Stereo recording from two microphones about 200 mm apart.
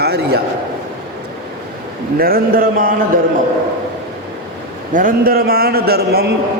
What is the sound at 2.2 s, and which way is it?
Speech, 45° right (ahead or behind).